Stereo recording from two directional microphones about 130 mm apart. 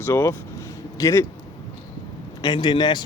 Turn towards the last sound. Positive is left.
turn(degrees=35)  # may be behind; listen again after turning